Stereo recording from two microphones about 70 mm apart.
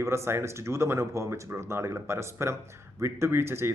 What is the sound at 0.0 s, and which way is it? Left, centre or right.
Speech, right.